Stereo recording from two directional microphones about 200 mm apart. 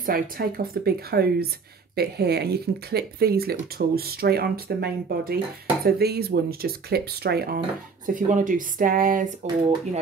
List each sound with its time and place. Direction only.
0.0 s speech: 45° right (ahead or behind)
8.1 s speech: 40° right (ahead or behind)